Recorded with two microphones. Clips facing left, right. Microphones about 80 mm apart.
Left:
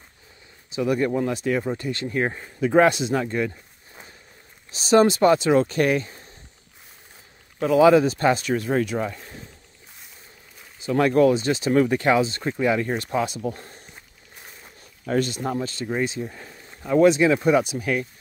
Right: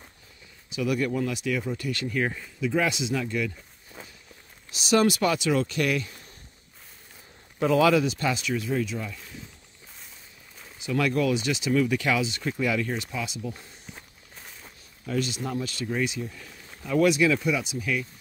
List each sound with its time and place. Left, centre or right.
0.7 s speech: left
4.6 s speech: left
7.8 s speech: left
10.8 s speech: left
12.9 s speech: left
15.0 s speech: left